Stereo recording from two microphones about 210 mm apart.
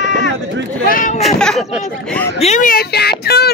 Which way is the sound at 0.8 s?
40° left (ahead or behind).